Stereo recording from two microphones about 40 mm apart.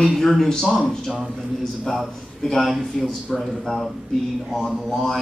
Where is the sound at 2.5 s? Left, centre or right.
Centre.